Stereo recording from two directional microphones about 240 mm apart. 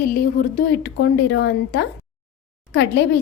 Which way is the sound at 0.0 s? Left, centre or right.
Left.